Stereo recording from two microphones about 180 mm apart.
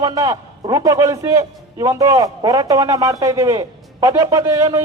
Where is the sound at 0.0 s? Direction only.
20° right (ahead or behind).